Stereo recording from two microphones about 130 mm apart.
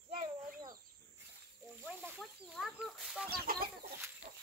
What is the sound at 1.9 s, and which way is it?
Snake, 10° right (ahead or behind).